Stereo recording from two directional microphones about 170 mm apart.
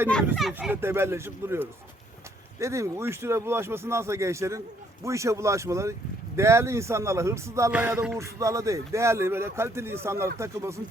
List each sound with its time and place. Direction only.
0.3 s speech: centre (ahead or behind)
0.7 s speech: 15° right (ahead or behind)